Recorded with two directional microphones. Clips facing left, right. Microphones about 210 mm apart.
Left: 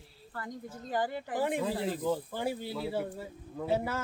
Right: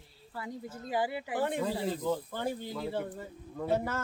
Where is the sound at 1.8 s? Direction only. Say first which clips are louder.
Even; 5° left (ahead or behind).